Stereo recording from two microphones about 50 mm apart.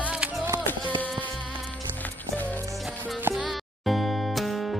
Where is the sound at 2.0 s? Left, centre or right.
Left.